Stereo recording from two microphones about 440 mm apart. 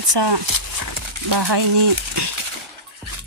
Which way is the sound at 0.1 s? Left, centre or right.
Right.